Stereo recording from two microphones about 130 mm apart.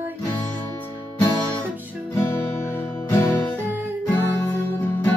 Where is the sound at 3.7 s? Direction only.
15° right (ahead or behind).